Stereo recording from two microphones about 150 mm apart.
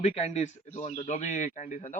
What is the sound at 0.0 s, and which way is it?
A man's voice, 45° left (ahead or behind).